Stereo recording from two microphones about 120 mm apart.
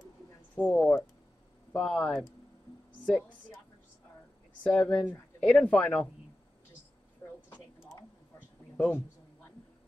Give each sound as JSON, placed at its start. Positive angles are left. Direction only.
{"t": 0.6, "sound": "speech", "side_deg": 5}
{"t": 4.7, "sound": "speech", "side_deg": 10}
{"t": 7.2, "sound": "a sound", "side_deg": 20}
{"t": 8.7, "sound": "speech", "side_deg": 10}